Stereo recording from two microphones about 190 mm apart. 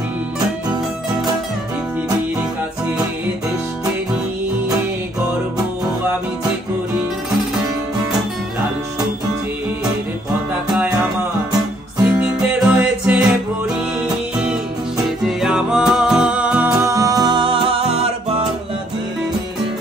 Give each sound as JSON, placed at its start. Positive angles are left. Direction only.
{"t": 12.1, "sound": "music", "side_deg": -5}
{"t": 15.0, "sound": "music", "side_deg": 0}